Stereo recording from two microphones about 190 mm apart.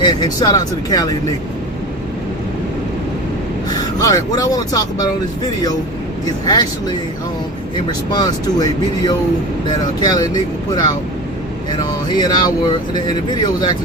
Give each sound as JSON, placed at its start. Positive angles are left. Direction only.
{"t": 0.0, "sound": "speech", "side_deg": 20}
{"t": 4.0, "sound": "speech", "side_deg": 20}
{"t": 6.5, "sound": "speech", "side_deg": 20}
{"t": 8.1, "sound": "speech", "side_deg": 20}
{"t": 11.8, "sound": "speech", "side_deg": 25}